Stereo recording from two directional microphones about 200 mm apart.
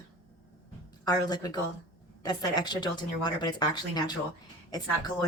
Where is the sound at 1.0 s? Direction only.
20° left (ahead or behind).